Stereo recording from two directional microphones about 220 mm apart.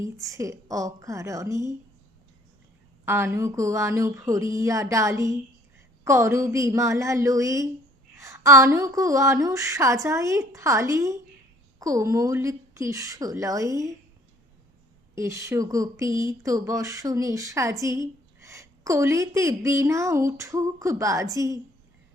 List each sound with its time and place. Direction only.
0.2 s speech: 15° right (ahead or behind)
3.1 s speech: 10° right (ahead or behind)
15.1 s speech: 15° right (ahead or behind)